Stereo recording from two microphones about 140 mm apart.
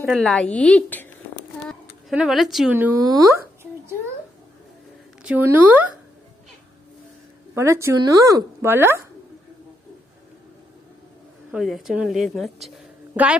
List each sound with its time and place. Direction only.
0.1 s a woman's voice: 5° left (ahead or behind)
1.6 s a sound: centre (ahead or behind)
2.7 s speech: 15° right (ahead or behind)
3.0 s a sound: 25° right (ahead or behind)
5.2 s speech: 15° right (ahead or behind)
7.5 s speech: 20° right (ahead or behind)
11.5 s speech: 5° right (ahead or behind)
13.2 s speech: 10° right (ahead or behind)